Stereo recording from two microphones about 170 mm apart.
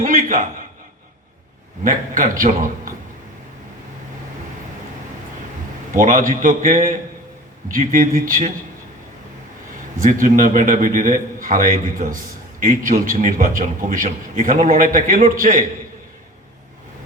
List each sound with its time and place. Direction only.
0.0 s a man's voice: 50° right (ahead or behind)
1.8 s a man's voice: 50° right (ahead or behind)
5.9 s a man's voice: 50° right (ahead or behind)
10.0 s a man's voice: 50° right (ahead or behind)